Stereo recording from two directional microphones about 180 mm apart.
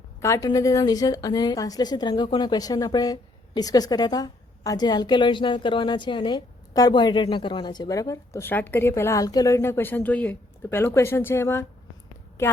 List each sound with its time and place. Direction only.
0.2 s a woman's voice: 20° left (ahead or behind)